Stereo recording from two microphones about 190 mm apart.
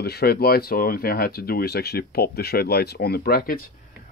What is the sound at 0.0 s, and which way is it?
Speech, 55° left (ahead or behind).